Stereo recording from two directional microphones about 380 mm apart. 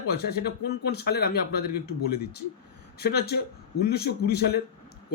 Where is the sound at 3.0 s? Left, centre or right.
Left.